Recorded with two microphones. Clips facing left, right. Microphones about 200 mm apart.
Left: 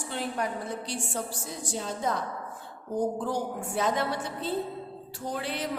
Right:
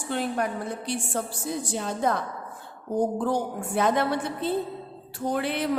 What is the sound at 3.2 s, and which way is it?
A woman's voice, 60° right (ahead or behind).